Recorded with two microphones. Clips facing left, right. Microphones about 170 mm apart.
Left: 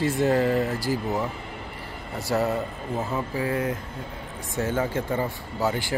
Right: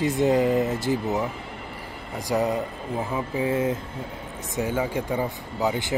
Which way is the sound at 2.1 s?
15° right (ahead or behind).